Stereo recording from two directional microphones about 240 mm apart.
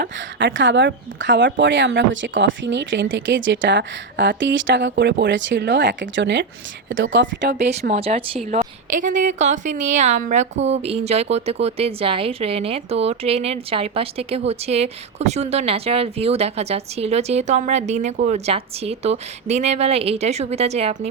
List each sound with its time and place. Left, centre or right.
0.0 s speech: right
7.6 s speech: right